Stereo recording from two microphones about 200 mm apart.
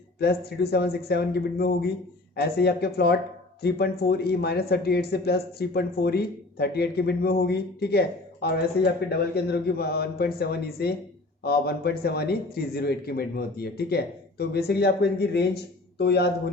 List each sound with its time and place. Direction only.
0.2 s speech: 50° left (ahead or behind)